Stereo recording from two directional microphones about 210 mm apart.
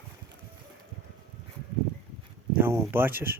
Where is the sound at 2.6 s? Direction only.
10° right (ahead or behind).